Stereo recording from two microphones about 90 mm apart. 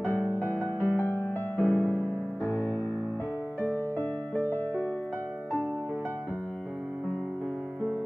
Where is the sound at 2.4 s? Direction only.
20° left (ahead or behind).